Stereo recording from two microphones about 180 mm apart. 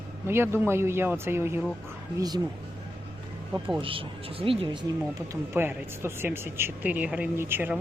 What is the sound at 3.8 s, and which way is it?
Speech, 30° right (ahead or behind).